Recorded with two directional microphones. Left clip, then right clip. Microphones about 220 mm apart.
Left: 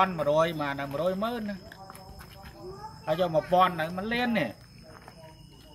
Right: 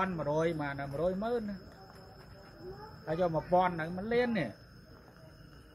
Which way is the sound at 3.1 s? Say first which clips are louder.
Left 5 dB; centre (ahead or behind).